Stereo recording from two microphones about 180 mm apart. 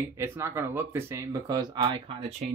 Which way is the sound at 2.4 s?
40° right (ahead or behind).